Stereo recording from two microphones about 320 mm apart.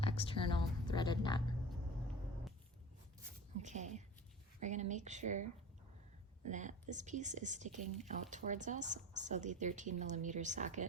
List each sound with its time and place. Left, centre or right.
0.0 s speech: centre
3.6 s speech: right